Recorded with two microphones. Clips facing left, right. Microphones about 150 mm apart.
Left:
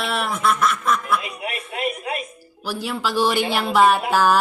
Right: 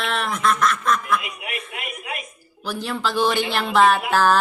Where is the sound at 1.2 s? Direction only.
30° left (ahead or behind).